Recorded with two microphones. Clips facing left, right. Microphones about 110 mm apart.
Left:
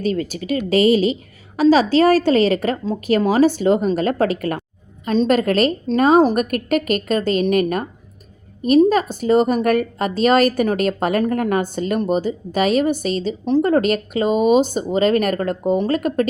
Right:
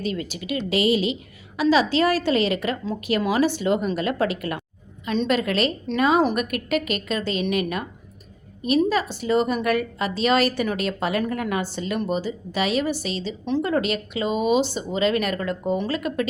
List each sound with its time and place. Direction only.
0.0 s a woman's voice: 40° left (ahead or behind)
8.9 s a woman's voice: 45° left (ahead or behind)